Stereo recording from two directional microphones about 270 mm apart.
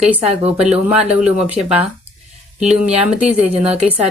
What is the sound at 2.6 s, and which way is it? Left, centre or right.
Speech, centre.